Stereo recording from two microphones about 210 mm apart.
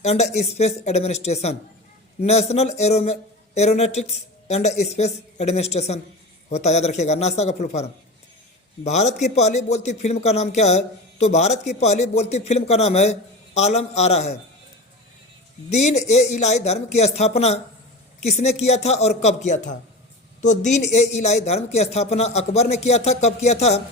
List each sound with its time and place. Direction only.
0.0 s a man's voice: 30° left (ahead or behind)
15.7 s a man's voice: 30° left (ahead or behind)